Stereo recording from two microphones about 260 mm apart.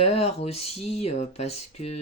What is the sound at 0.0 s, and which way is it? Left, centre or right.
Speech, left.